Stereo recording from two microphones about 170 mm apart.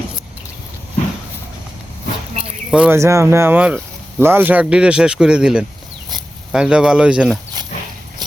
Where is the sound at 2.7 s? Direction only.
5° right (ahead or behind).